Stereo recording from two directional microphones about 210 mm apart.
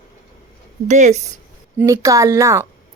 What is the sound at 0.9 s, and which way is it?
Speech, 35° right (ahead or behind).